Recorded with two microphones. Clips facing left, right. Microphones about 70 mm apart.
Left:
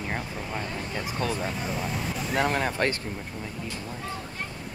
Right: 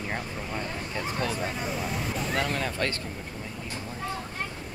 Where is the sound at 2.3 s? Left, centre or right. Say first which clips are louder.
Left 6 dB; left.